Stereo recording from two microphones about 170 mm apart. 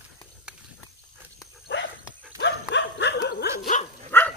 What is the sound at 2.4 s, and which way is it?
Dog, 90° left.